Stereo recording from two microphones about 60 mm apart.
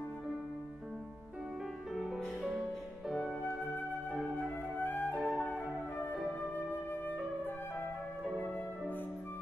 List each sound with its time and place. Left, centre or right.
2.0 s music: centre
4.4 s flute: left
6.5 s flute: left